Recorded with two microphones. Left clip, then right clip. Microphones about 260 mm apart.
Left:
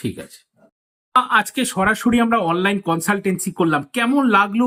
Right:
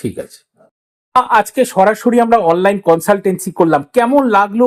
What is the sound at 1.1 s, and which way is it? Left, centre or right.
Speech, centre.